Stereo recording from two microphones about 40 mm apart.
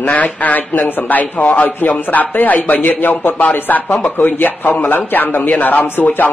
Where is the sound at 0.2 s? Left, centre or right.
Left.